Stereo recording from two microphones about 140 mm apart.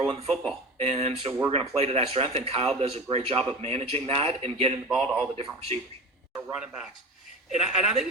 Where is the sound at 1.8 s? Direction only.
45° right (ahead or behind).